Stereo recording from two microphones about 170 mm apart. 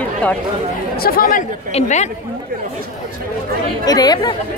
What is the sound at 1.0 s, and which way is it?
Speech, 60° left (ahead or behind).